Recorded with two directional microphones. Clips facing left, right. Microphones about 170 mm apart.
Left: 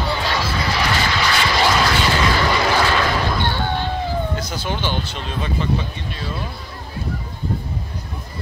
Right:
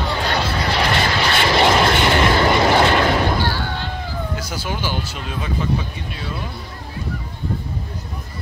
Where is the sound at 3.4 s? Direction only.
20° left (ahead or behind).